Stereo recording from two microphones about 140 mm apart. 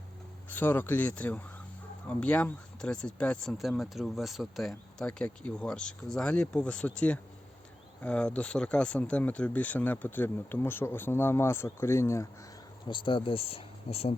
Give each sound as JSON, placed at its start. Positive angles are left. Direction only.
{"t": 0.5, "sound": "speech", "side_deg": 15}
{"t": 12.9, "sound": "speech", "side_deg": 35}